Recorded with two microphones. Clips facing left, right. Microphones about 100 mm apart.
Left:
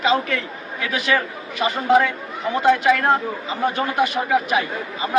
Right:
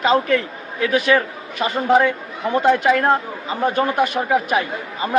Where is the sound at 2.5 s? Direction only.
50° right (ahead or behind).